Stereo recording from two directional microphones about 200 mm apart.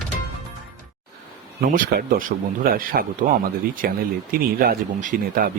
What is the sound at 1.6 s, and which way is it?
Speech, 45° right (ahead or behind).